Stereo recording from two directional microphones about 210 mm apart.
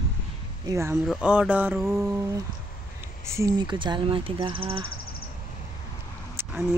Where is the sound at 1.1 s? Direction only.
5° right (ahead or behind).